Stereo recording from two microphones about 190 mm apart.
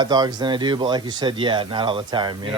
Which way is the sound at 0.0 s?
20° right (ahead or behind).